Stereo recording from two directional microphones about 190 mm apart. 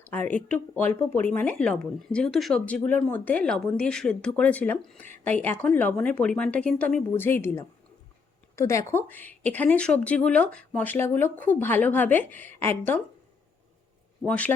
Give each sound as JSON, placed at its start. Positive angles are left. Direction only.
{"t": 0.0, "sound": "speech", "side_deg": 10}
{"t": 14.2, "sound": "speech", "side_deg": 5}